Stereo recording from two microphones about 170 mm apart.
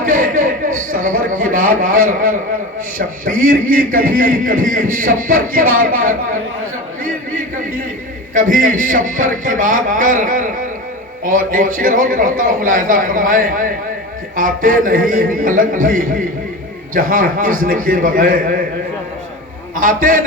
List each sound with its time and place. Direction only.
0.0 s a sound: 50° right (ahead or behind)
3.2 s a man's voice: 50° right (ahead or behind)
8.3 s a man's voice: 50° right (ahead or behind)
19.7 s a man's voice: 50° right (ahead or behind)